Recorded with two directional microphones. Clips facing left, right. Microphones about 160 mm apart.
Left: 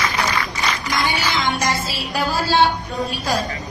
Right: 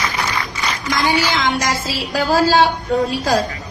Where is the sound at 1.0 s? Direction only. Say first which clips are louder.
Right 5 dB; 90° right.